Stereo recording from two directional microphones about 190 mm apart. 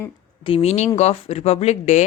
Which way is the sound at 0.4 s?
30° left (ahead or behind).